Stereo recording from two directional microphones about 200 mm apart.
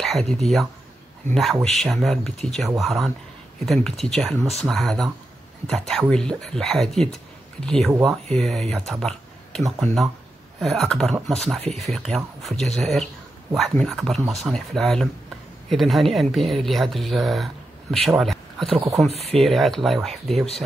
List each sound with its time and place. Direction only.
0.0 s speech: 5° left (ahead or behind)
19.0 s speech: 30° right (ahead or behind)
19.3 s speech: centre (ahead or behind)